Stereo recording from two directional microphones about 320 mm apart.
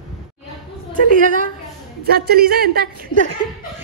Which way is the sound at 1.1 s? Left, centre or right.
Right.